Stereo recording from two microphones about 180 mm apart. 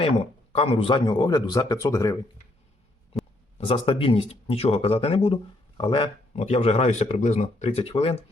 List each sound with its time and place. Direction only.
0.0 s speech: 30° left (ahead or behind)
3.6 s speech: 30° left (ahead or behind)